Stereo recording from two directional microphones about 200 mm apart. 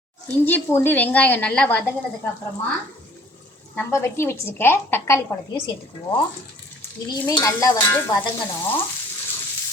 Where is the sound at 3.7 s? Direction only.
10° left (ahead or behind).